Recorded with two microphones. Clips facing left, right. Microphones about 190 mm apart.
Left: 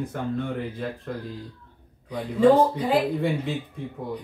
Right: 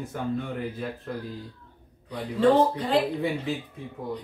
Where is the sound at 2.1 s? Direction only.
5° left (ahead or behind).